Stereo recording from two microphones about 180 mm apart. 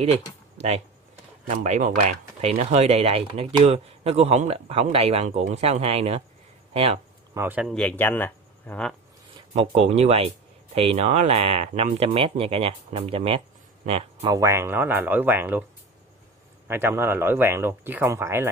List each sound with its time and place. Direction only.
0.6 s speech: 35° right (ahead or behind)
7.3 s speech: 10° right (ahead or behind)
7.6 s speech: 5° left (ahead or behind)
9.8 s speech: 35° right (ahead or behind)
14.2 s speech: 20° right (ahead or behind)
16.6 s speech: 10° right (ahead or behind)